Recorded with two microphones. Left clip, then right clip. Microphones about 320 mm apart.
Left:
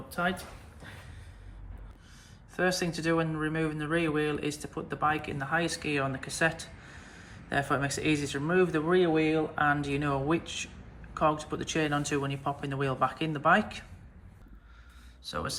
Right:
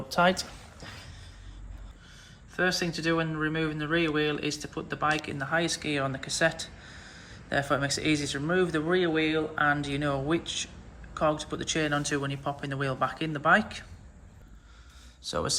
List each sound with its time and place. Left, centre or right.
0.1 s speech: centre
2.6 s speech: centre
15.2 s speech: centre